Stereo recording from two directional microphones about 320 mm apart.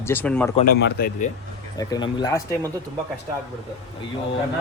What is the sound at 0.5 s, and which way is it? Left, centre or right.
Speech, left.